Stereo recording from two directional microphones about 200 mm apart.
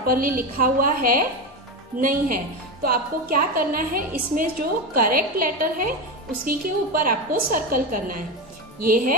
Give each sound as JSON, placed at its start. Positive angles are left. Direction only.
{"t": 0.0, "sound": "a woman's voice", "side_deg": -45}